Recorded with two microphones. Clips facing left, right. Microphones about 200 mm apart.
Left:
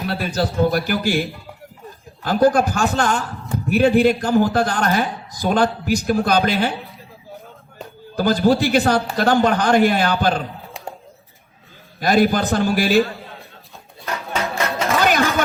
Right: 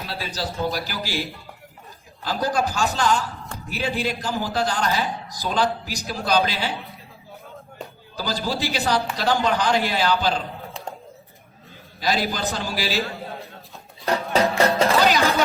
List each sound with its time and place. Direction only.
0.0 s a man's voice: 50° left (ahead or behind)
8.1 s a man's voice: 55° left (ahead or behind)
11.9 s a man's voice: 55° left (ahead or behind)
14.0 s music: 35° right (ahead or behind)
15.0 s chopping: 55° left (ahead or behind)